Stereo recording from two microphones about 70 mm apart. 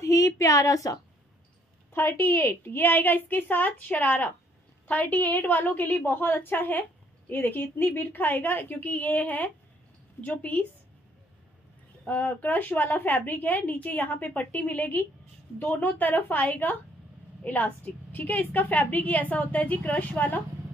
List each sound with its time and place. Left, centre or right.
0.0 s a woman's voice: left
2.0 s a woman's voice: left
12.0 s a woman's voice: centre